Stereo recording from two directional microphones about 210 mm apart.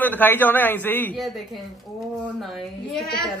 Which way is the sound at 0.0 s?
10° left (ahead or behind).